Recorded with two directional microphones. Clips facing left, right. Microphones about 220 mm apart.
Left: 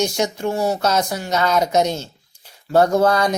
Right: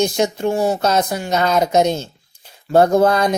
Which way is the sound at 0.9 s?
20° right (ahead or behind).